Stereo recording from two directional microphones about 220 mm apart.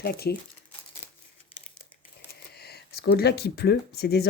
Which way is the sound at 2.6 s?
45° left (ahead or behind).